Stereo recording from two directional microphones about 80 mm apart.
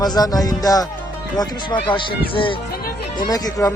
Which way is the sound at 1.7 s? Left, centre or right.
Left.